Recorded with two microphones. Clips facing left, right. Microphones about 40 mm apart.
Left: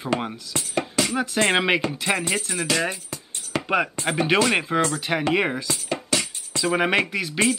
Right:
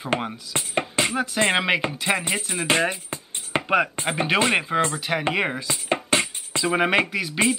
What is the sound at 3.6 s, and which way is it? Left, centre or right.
Speech, centre.